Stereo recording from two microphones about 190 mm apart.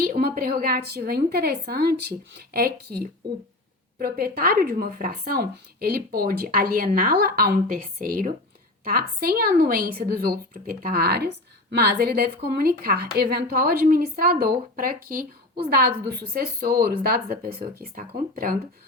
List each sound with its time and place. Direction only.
0.0 s speech: 50° right (ahead or behind)